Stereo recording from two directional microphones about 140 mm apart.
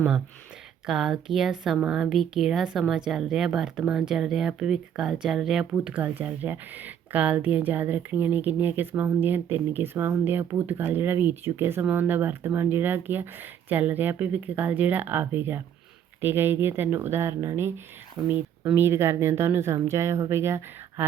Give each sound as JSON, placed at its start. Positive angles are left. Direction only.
{"t": 0.9, "sound": "speech", "side_deg": -5}